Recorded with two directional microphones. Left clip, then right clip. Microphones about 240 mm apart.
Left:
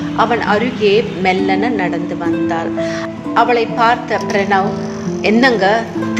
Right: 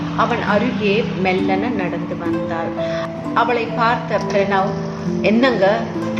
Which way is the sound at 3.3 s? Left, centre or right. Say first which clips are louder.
Left 5 dB; left.